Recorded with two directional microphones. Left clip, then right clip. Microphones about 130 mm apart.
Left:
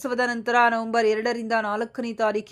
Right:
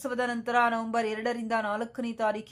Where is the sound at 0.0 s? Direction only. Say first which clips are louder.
Left 6 dB; 35° left (ahead or behind).